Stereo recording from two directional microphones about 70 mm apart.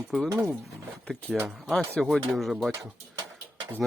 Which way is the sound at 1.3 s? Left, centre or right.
Centre.